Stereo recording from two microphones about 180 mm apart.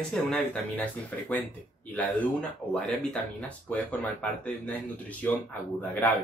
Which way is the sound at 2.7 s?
5° left (ahead or behind).